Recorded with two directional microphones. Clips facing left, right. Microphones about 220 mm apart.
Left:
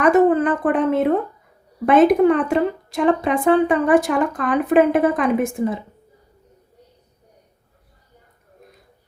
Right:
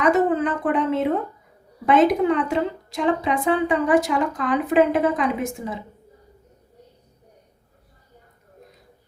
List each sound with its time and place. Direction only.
0.0 s a woman's voice: 50° left (ahead or behind)